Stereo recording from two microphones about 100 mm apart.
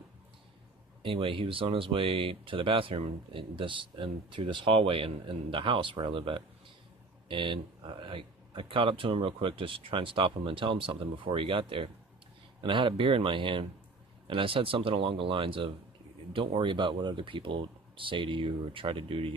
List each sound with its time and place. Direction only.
1.0 s speech: 60° right (ahead or behind)